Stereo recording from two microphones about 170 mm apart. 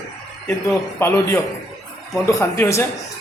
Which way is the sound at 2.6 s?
15° left (ahead or behind).